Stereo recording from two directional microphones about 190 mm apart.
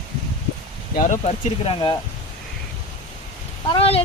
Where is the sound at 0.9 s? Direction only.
40° left (ahead or behind).